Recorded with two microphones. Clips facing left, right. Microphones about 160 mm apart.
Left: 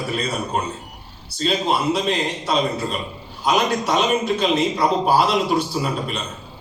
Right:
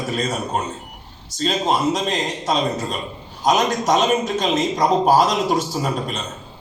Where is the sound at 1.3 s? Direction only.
40° right (ahead or behind).